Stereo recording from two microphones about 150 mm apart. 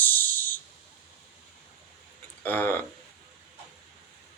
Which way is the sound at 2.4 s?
15° left (ahead or behind).